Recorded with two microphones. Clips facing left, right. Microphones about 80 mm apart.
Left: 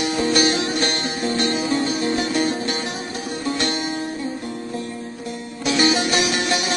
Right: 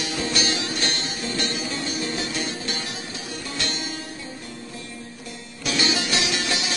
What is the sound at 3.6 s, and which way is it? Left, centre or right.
Music, left.